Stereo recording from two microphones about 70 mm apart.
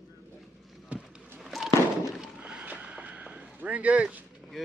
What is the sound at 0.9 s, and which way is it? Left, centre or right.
Basketball bounce, centre.